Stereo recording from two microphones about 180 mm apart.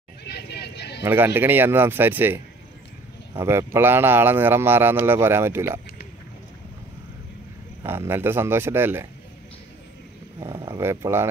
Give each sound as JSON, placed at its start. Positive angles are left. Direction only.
{"t": 0.2, "sound": "a sound", "side_deg": 65}
{"t": 1.0, "sound": "speech", "side_deg": -10}
{"t": 7.8, "sound": "speech", "side_deg": -15}
{"t": 10.4, "sound": "speech", "side_deg": -20}